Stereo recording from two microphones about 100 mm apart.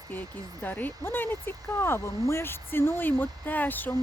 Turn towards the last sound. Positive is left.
turn(degrees=20)  # may be behind; listen again after turning